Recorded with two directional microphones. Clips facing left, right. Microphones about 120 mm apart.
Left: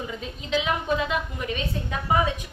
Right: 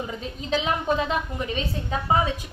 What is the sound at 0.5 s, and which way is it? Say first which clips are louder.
A woman's voice: right 1 dB; 35° right (ahead or behind).